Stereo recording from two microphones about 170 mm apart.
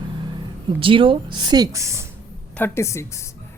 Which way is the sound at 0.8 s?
30° right (ahead or behind).